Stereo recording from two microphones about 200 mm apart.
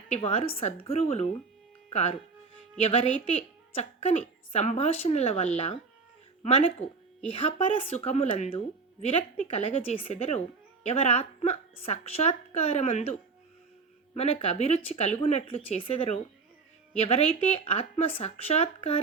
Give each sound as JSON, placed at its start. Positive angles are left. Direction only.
{"t": 0.1, "sound": "a woman's voice", "side_deg": 30}